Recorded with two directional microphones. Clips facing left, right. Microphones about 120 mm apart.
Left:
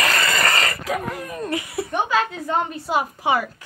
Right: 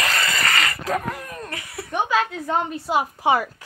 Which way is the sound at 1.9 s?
Centre (ahead or behind).